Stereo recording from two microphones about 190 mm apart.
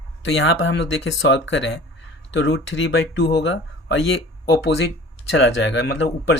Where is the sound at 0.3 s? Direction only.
70° left (ahead or behind).